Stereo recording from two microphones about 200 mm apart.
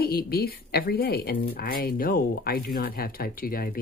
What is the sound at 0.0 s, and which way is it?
Speech, 50° left (ahead or behind).